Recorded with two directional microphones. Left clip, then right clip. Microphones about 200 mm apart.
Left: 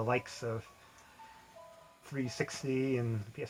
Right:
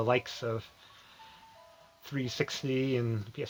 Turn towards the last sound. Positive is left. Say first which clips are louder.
# right 4 dB
turn(degrees=-50)  # may be behind; listen again after turning